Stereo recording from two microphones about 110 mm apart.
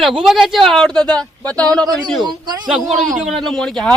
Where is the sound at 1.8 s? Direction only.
40° right (ahead or behind).